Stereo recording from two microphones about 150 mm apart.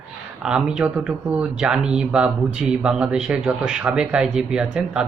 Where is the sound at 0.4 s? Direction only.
5° right (ahead or behind).